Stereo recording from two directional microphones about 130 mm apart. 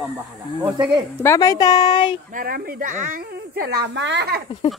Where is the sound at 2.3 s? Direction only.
90° right.